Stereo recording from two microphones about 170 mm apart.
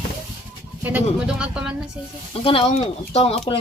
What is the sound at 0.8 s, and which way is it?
Speech, 10° right (ahead or behind).